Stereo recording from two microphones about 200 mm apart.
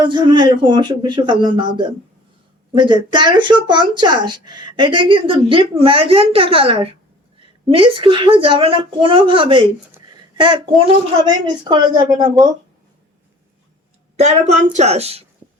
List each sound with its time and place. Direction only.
0.0 s speech: 25° right (ahead or behind)
14.2 s a woman's voice: 35° right (ahead or behind)